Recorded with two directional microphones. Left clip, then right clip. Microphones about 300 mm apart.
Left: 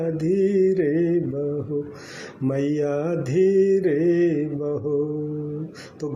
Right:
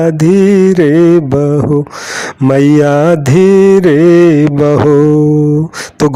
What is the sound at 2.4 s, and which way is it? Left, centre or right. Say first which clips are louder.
Mantra: right 15 dB; right.